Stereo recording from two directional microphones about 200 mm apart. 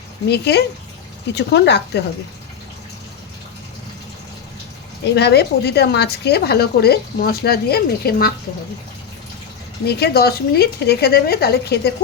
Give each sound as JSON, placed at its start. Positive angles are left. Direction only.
{"t": 0.3, "sound": "speech", "side_deg": 55}
{"t": 5.1, "sound": "a woman's voice", "side_deg": 55}
{"t": 9.8, "sound": "a woman's voice", "side_deg": 55}